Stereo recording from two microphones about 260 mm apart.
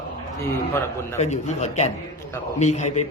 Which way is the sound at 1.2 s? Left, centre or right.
Left.